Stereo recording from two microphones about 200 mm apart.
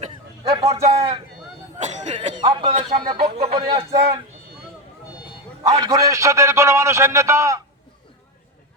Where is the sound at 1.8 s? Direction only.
35° right (ahead or behind).